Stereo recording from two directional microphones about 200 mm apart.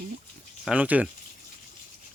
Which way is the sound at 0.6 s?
5° right (ahead or behind).